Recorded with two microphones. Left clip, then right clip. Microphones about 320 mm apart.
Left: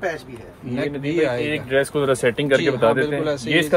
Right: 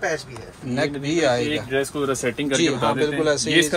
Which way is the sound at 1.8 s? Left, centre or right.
Left.